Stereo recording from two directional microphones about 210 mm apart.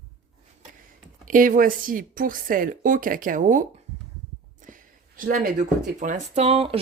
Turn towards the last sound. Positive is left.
turn(degrees=-30)  # may be behind; listen again after turning